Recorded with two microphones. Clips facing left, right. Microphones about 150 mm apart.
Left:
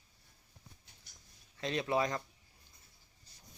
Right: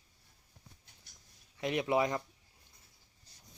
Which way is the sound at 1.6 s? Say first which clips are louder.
Right 2 dB; 15° right (ahead or behind).